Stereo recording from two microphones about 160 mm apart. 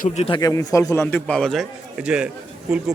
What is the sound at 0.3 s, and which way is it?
A man's voice, 25° left (ahead or behind).